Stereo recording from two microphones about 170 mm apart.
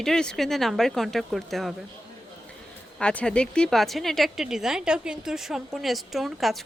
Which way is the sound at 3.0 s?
5° left (ahead or behind).